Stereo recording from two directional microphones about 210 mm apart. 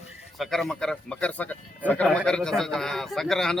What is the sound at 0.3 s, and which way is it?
A man's voice, centre (ahead or behind).